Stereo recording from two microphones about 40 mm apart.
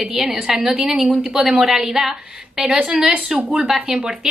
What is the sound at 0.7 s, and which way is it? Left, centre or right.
A woman's voice, centre.